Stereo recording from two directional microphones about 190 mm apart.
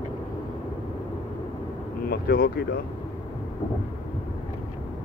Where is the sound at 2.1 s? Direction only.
50° left (ahead or behind).